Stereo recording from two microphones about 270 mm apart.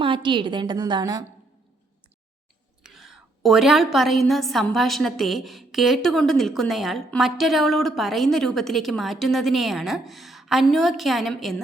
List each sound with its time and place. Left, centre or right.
0.0 s a woman's voice: centre
2.8 s a woman's voice: centre